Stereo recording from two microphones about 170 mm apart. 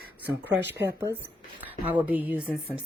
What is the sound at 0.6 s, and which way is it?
Speech, 90° right.